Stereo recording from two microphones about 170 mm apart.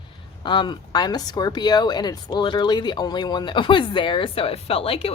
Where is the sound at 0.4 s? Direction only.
25° left (ahead or behind).